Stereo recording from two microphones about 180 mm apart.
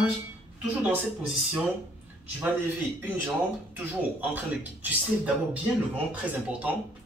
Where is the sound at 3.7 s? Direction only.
10° right (ahead or behind).